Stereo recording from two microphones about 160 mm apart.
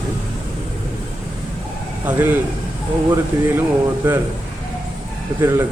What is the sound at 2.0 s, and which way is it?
A man's voice, 10° right (ahead or behind).